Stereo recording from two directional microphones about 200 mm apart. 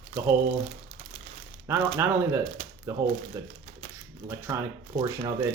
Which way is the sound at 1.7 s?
10° right (ahead or behind).